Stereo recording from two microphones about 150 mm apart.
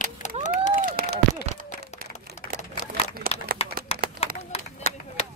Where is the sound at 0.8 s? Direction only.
80° right.